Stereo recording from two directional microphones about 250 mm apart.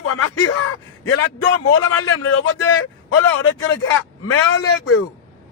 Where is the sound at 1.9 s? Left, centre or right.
Left.